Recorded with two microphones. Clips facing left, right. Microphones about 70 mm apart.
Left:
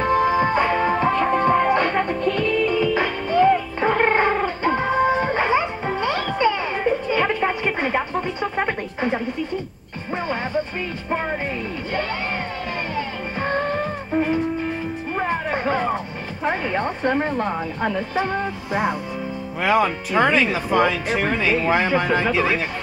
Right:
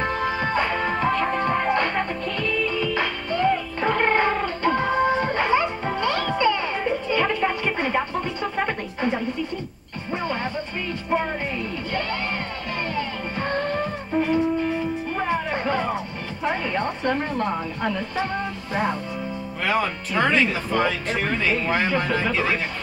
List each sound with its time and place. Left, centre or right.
0.0 s music: centre
12.9 s music: centre
15.1 s music: left
16.4 s speech: centre